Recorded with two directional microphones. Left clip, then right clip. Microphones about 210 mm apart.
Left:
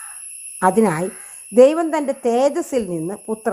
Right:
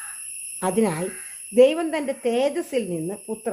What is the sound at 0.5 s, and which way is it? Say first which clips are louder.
A woman's voice: left 7 dB; 25° left (ahead or behind).